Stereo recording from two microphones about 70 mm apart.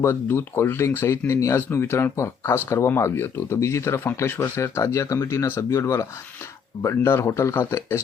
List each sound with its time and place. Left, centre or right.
0.0 s speech: left
1.5 s speech: left